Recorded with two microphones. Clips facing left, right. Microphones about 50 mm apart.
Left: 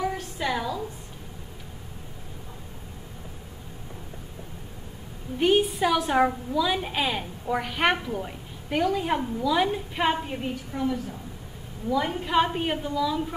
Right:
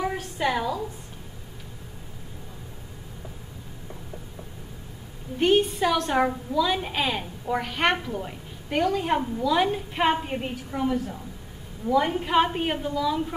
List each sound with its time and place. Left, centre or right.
0.0 s a sound: centre
5.4 s a woman's voice: centre
10.2 s a woman's voice: centre